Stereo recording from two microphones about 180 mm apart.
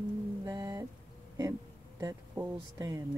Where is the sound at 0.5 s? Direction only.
20° right (ahead or behind).